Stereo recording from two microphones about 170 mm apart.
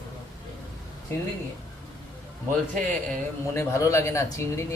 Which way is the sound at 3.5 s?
15° left (ahead or behind).